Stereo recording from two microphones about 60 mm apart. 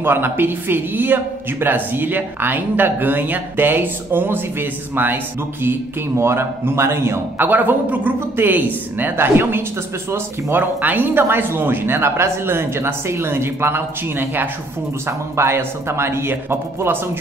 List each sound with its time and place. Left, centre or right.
0.0 s speech: right
7.4 s speech: right
15.0 s a man's voice: right